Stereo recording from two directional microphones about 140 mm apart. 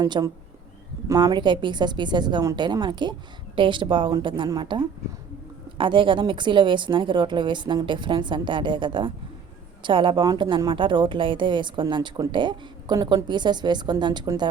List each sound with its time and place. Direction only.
0.0 s a woman's voice: 30° right (ahead or behind)